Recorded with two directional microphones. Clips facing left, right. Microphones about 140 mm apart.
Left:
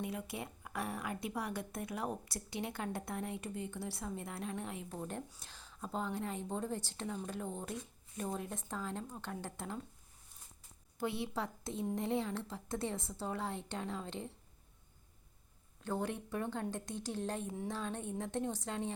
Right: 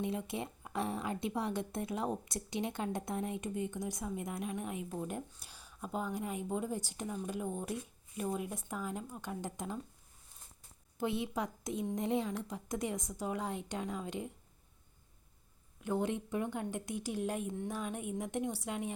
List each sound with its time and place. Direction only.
0.0 s a woman's voice: 25° right (ahead or behind)
10.9 s a woman's voice: 20° right (ahead or behind)
15.8 s a woman's voice: 15° right (ahead or behind)